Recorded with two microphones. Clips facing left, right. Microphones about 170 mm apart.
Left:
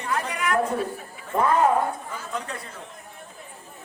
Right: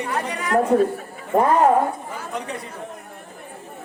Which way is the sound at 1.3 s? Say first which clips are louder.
Right 5 dB; 40° right (ahead or behind).